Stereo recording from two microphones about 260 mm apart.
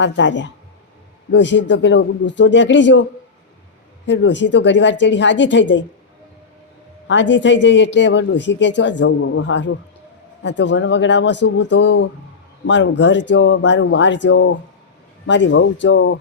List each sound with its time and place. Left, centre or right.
0.0 s speech: left
7.1 s speech: left